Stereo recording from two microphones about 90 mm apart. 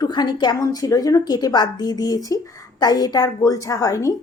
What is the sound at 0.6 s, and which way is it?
A woman's voice, 40° left (ahead or behind).